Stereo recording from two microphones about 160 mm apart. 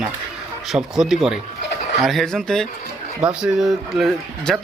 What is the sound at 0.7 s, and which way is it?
Speech, 5° right (ahead or behind).